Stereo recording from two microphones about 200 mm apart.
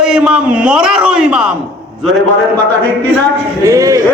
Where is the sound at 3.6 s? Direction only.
15° right (ahead or behind).